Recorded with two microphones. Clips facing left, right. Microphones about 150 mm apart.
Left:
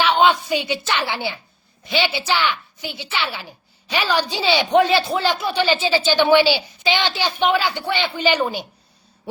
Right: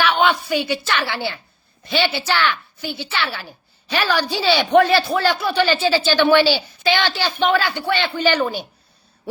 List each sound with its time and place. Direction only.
0.0 s a woman's voice: 20° left (ahead or behind)